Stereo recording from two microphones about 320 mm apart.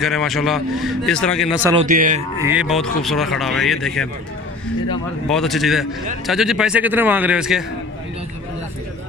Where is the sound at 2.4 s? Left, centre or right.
Centre.